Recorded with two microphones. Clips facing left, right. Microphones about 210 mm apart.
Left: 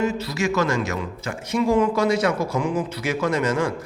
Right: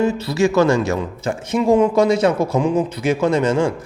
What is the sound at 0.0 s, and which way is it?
Speech, 30° right (ahead or behind).